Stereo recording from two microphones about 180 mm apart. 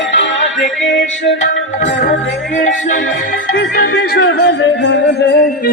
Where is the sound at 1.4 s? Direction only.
45° left (ahead or behind).